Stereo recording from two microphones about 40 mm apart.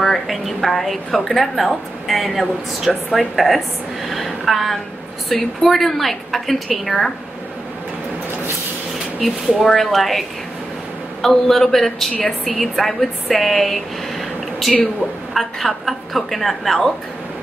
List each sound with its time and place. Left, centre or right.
0.0 s a woman's voice: centre
4.1 s a sound: centre
5.3 s a woman's voice: centre
9.6 s a woman's voice: centre
11.2 s a woman's voice: centre